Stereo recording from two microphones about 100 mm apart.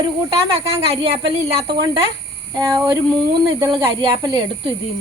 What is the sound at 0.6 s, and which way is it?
Speech, 75° right (ahead or behind).